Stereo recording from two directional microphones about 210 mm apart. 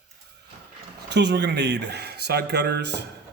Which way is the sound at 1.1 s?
55° right (ahead or behind).